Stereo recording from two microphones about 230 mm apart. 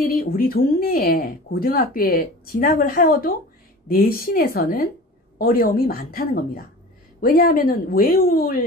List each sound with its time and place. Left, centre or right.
0.0 s speech: left